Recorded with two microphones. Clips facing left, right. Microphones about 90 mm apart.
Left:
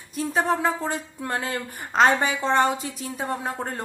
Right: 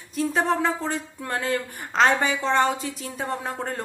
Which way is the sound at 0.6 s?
10° left (ahead or behind).